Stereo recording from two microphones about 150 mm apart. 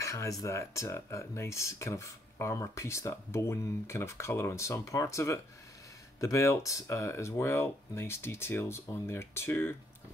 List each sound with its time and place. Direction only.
0.0 s speech: 20° left (ahead or behind)